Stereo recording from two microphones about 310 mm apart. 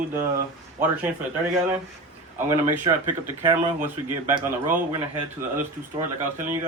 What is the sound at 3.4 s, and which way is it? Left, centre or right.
Speech, centre.